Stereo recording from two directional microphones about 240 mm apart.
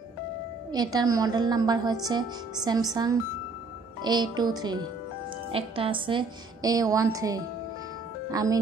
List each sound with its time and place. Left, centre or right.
0.7 s a woman's voice: centre